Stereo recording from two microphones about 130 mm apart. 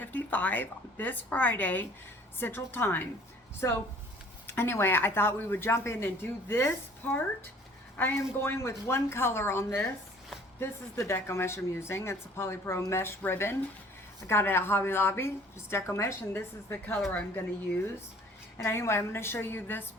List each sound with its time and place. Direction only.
0.0 s a woman's voice: 15° left (ahead or behind)